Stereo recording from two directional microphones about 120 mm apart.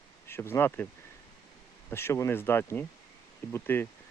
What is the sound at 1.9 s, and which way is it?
Speech, 20° left (ahead or behind).